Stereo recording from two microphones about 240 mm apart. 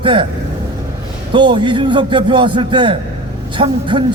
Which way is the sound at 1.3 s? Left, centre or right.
Centre.